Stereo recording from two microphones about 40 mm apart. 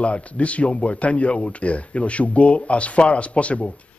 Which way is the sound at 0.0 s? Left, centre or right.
Left.